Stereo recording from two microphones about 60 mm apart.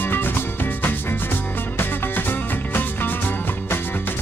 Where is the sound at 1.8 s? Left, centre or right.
Left.